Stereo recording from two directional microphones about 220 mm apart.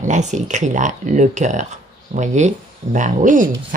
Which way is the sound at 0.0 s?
35° right (ahead or behind).